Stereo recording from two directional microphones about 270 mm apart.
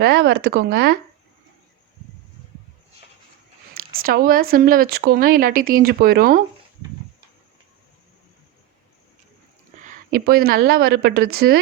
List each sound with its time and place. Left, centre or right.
0.0 s speech: right
3.8 s speech: right
9.8 s speech: right